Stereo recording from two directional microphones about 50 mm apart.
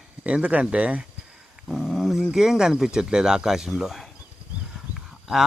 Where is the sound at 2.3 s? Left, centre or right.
Centre.